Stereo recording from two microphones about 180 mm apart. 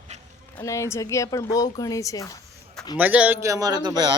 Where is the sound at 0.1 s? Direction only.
40° right (ahead or behind).